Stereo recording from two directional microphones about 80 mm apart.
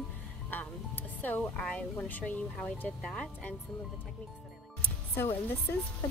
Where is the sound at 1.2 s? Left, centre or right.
Left.